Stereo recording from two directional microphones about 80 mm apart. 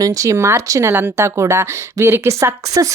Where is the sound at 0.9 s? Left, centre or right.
Right.